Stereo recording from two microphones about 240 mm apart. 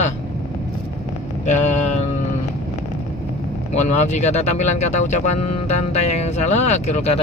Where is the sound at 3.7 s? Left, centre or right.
Left.